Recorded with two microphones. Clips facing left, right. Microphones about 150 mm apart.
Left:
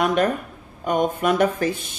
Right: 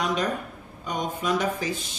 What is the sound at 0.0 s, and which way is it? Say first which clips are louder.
Speech: left 6 dB; 55° left (ahead or behind).